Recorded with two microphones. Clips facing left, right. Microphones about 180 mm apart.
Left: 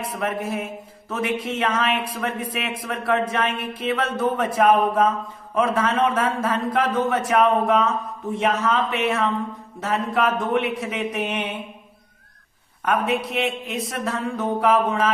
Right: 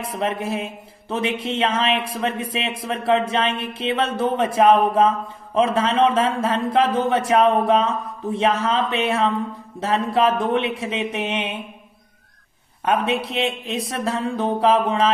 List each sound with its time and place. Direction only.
0.2 s speech: 30° right (ahead or behind)
12.8 s speech: 25° right (ahead or behind)